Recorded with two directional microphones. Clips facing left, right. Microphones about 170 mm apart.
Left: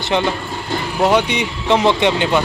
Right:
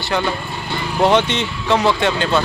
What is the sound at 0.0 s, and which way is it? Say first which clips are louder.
Speech: left 3 dB; 20° left (ahead or behind).